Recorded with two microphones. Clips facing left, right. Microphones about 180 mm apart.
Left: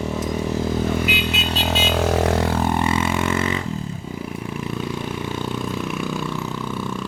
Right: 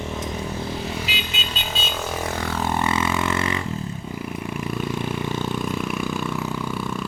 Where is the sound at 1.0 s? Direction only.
60° left (ahead or behind).